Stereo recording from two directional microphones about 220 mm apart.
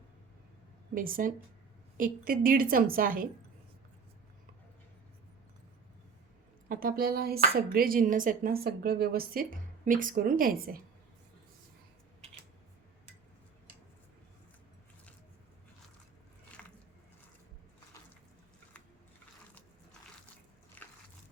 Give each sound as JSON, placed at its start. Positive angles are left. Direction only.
{"t": 0.9, "sound": "speech", "side_deg": -40}
{"t": 6.7, "sound": "speech", "side_deg": -40}
{"t": 16.6, "sound": "biting", "side_deg": 5}
{"t": 20.8, "sound": "a sound", "side_deg": 10}